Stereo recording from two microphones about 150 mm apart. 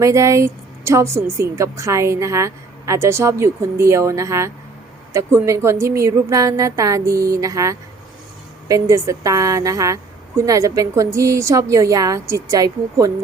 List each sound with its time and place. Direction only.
0.0 s a woman's voice: 20° right (ahead or behind)